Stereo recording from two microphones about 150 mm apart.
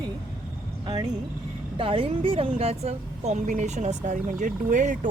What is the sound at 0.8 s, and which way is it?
A woman's voice, 30° right (ahead or behind).